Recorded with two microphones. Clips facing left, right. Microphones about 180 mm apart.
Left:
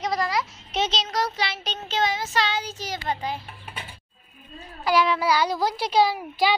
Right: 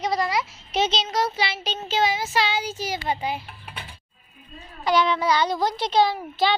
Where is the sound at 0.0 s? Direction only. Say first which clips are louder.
Right 1 dB; centre (ahead or behind).